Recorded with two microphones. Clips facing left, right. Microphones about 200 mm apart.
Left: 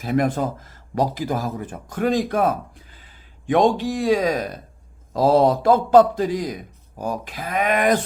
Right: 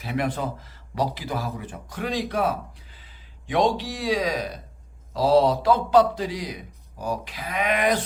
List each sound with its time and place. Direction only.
0.0 s a man's voice: 45° left (ahead or behind)